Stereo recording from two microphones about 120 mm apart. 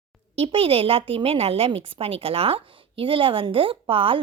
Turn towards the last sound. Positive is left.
turn(degrees=-50)  # may be behind; listen again after turning